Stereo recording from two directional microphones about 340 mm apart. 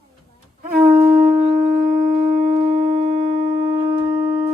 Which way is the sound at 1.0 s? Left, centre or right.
Right.